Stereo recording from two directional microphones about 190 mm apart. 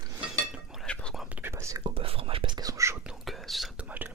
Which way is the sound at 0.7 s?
5° left (ahead or behind).